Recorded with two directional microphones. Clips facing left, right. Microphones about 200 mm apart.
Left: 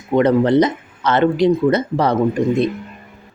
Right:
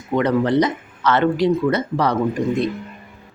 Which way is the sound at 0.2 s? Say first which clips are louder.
Left 4 dB; 25° left (ahead or behind).